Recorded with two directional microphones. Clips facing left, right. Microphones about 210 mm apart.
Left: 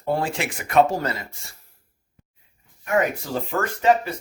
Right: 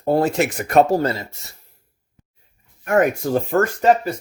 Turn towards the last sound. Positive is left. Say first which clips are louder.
# right 3 dB
turn(degrees=-45)  # may be behind; listen again after turning